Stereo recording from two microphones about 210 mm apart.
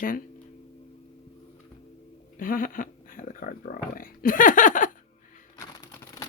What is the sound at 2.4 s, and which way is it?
Speech, 40° left (ahead or behind).